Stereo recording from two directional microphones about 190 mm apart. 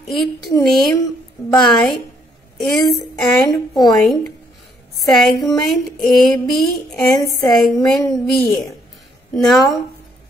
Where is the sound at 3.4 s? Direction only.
20° left (ahead or behind).